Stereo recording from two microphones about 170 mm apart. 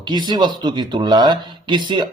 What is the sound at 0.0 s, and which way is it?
Speech, 25° right (ahead or behind).